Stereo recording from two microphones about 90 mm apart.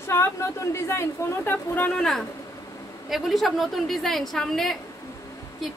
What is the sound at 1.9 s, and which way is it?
A woman's voice, 5° left (ahead or behind).